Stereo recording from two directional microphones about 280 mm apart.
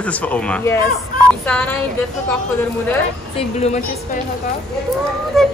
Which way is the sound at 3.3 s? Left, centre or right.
Left.